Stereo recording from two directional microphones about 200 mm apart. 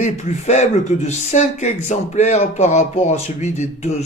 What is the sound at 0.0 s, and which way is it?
Speech, 35° left (ahead or behind).